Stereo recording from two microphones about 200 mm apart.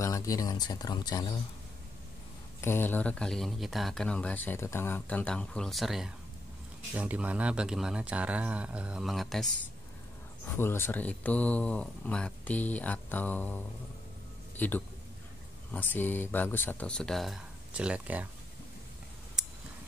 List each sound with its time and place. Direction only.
0.0 s speech: 15° left (ahead or behind)
2.6 s speech: 10° left (ahead or behind)
10.6 s speech: 10° left (ahead or behind)
14.6 s speech: 10° left (ahead or behind); by 18.2 s 5° right (ahead or behind)